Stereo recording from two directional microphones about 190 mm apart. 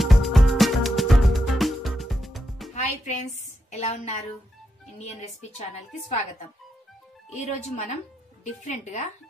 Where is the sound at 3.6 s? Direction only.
35° left (ahead or behind).